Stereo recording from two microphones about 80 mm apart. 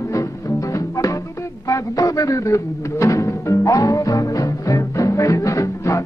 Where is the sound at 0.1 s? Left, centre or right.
Left.